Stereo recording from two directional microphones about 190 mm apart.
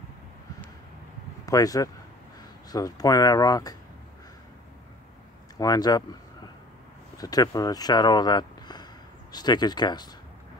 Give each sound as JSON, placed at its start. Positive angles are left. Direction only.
{"t": 1.4, "sound": "speech", "side_deg": 20}
{"t": 5.6, "sound": "speech", "side_deg": 20}
{"t": 7.2, "sound": "speech", "side_deg": 20}